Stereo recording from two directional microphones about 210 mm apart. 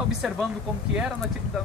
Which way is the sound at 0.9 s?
5° right (ahead or behind).